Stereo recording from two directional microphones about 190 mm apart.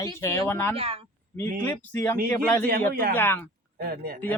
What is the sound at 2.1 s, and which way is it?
Speech, 50° right (ahead or behind).